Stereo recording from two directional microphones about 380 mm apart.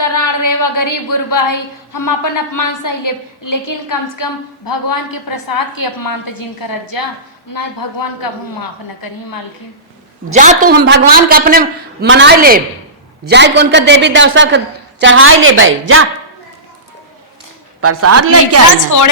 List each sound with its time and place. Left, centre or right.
0.0 s a woman's voice: left
10.3 s a man's voice: centre
17.7 s a woman's voice: right
18.8 s a woman's voice: left